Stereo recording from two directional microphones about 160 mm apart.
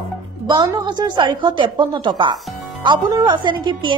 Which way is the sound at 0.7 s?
25° right (ahead or behind).